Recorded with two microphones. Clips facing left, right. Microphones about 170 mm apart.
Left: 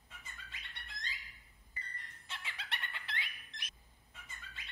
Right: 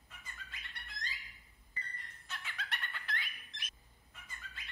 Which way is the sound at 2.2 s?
30° left (ahead or behind).